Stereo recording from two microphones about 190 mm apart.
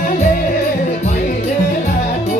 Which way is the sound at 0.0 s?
45° left (ahead or behind).